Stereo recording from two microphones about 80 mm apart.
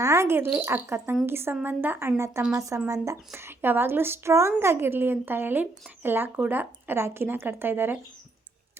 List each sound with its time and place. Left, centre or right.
0.0 s speech: right